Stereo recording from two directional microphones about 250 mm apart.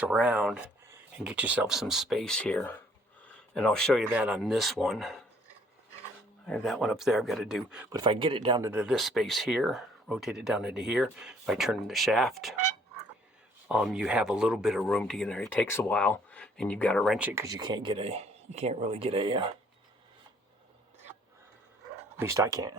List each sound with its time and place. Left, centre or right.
0.0 s speech: centre
6.4 s speech: centre
7.9 s speech: centre
8.7 s speech: centre
13.7 s speech: centre; by 19.5 s right
22.2 s speech: centre